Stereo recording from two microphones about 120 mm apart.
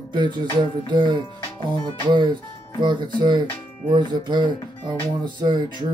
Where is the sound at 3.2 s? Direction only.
40° right (ahead or behind).